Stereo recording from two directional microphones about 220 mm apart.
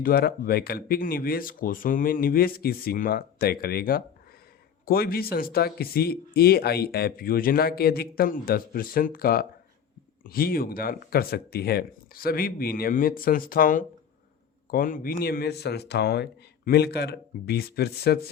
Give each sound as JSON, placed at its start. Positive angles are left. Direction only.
{"t": 0.0, "sound": "speech", "side_deg": 45}